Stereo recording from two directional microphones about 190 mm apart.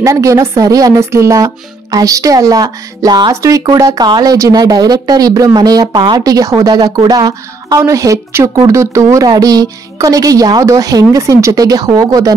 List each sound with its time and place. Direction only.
0.0 s speech: 15° right (ahead or behind)